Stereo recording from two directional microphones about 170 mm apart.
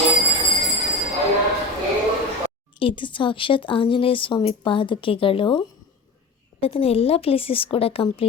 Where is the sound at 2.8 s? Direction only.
30° left (ahead or behind).